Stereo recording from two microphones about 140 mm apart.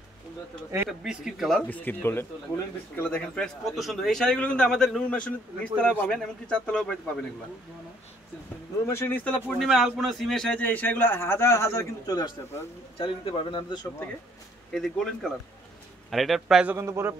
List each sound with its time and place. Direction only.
0.8 s speech: 5° right (ahead or behind)
1.7 s speech: 10° left (ahead or behind)
8.9 s speech: 15° left (ahead or behind)
9.6 s speech: centre (ahead or behind); by 12.6 s 25° left (ahead or behind)
13.0 s a man's voice: 40° left (ahead or behind)
14.7 s speech: 5° left (ahead or behind)
16.7 s a man's voice: 20° right (ahead or behind)